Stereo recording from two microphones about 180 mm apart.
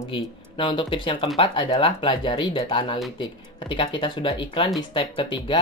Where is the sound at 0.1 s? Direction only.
30° left (ahead or behind).